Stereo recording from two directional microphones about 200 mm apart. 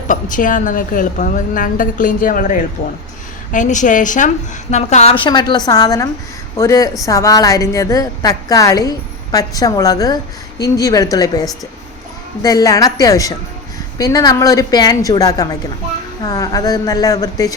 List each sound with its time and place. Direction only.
0.1 s a woman's voice: 40° left (ahead or behind); by 17.5 s 15° left (ahead or behind)